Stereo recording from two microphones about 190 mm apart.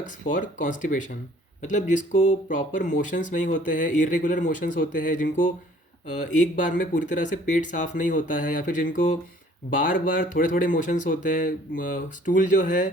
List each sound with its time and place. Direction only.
0.3 s speech: 45° left (ahead or behind)